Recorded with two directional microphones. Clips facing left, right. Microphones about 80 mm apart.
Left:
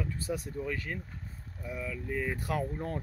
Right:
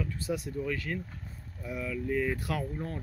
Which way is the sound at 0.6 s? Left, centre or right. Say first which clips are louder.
Right 2 dB; centre.